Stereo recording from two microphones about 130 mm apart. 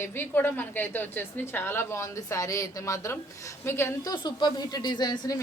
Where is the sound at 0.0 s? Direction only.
15° left (ahead or behind).